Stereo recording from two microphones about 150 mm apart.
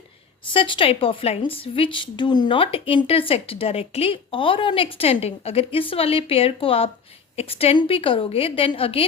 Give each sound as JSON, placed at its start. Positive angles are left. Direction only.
{"t": 0.5, "sound": "a woman's voice", "side_deg": 35}